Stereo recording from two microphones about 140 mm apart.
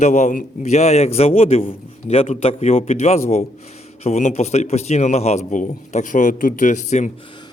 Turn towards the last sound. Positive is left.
turn(degrees=60)  # may be behind; listen again after turning